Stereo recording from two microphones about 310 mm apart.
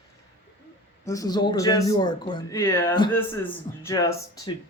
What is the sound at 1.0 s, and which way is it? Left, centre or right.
Speech, centre.